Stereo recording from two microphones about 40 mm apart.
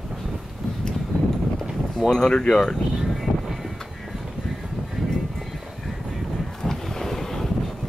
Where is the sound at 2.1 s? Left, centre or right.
Centre.